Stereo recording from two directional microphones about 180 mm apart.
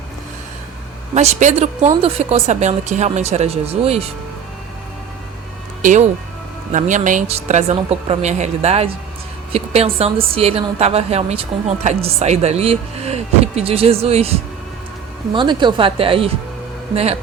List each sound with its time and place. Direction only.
1.1 s a woman's voice: 40° right (ahead or behind)
5.8 s a woman's voice: 45° right (ahead or behind)